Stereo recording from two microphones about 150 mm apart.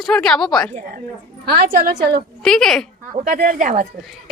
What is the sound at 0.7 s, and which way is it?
Speech, 60° right (ahead or behind).